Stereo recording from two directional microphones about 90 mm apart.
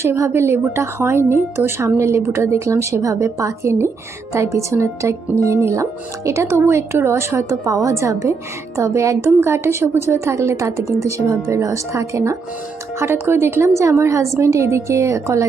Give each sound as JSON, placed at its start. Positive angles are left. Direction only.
{"t": 0.0, "sound": "a woman's voice", "side_deg": -30}